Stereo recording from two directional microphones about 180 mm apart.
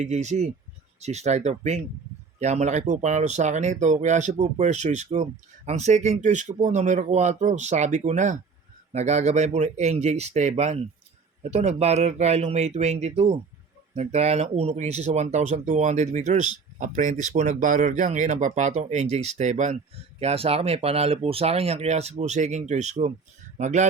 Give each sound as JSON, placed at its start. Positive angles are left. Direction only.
{"t": 0.0, "sound": "speech", "side_deg": -40}